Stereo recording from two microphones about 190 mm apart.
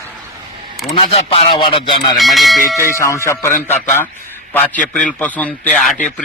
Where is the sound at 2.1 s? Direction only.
Centre (ahead or behind).